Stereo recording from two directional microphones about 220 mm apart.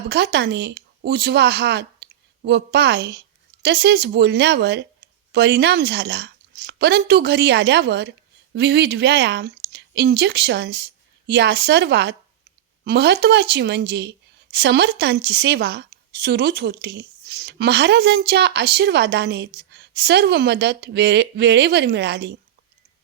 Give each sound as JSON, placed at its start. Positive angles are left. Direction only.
{"t": 0.1, "sound": "a woman's voice", "side_deg": -50}